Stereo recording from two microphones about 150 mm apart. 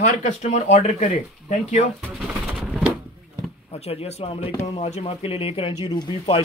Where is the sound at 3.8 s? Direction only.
45° left (ahead or behind).